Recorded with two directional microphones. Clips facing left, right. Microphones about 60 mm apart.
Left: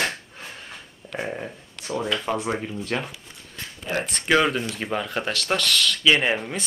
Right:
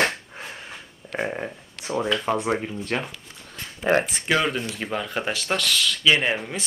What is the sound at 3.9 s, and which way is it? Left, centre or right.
Speech, right.